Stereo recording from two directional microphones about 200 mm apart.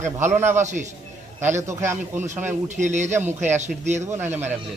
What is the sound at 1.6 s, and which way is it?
Speech, 15° right (ahead or behind).